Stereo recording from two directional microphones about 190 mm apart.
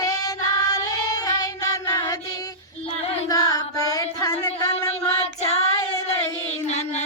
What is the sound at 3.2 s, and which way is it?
Music, 20° left (ahead or behind).